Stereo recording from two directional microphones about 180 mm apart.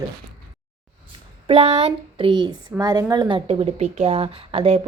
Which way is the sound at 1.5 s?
35° right (ahead or behind).